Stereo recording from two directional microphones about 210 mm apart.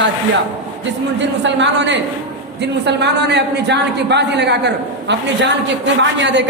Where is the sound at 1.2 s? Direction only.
60° right (ahead or behind).